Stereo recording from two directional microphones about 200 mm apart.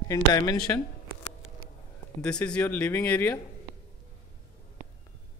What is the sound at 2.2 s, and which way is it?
Speech, 5° left (ahead or behind).